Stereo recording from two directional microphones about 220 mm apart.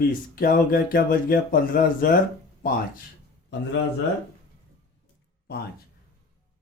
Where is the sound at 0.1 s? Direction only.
40° left (ahead or behind).